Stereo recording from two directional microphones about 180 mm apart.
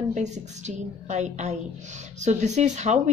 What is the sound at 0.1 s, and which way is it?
Speech, 40° right (ahead or behind).